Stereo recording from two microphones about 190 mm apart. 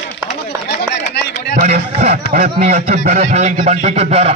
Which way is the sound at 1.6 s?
35° right (ahead or behind).